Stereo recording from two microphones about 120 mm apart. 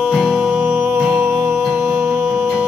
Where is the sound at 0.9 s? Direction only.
10° right (ahead or behind).